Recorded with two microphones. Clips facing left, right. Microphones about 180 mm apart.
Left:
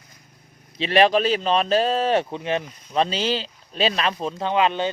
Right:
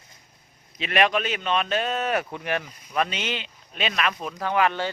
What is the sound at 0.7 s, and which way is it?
Speech, 30° left (ahead or behind).